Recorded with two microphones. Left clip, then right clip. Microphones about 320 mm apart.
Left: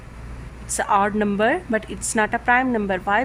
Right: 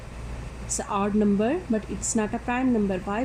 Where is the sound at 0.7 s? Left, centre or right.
Left.